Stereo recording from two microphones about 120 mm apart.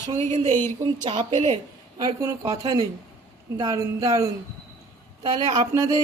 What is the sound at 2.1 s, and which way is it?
Speech, 25° right (ahead or behind).